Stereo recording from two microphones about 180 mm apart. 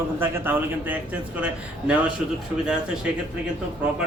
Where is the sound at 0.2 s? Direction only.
10° right (ahead or behind).